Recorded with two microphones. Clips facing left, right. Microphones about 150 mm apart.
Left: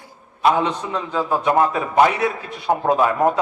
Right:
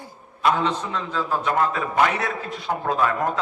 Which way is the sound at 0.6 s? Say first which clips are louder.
Left 2 dB; 15° left (ahead or behind).